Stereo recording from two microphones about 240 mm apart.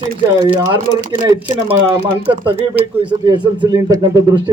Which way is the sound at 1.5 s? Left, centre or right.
Right.